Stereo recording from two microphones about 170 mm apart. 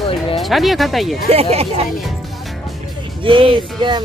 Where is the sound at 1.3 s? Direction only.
35° right (ahead or behind).